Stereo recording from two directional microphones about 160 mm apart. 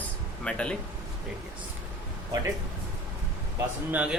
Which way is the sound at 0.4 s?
5° left (ahead or behind).